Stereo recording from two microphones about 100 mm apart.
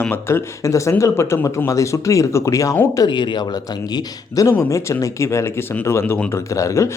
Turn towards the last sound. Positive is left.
turn(degrees=30)  # may be behind; listen again after turning